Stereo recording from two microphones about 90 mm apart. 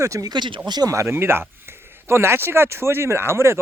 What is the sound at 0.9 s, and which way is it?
Speech, 30° right (ahead or behind).